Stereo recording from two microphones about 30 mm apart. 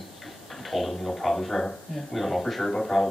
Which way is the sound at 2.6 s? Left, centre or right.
Left.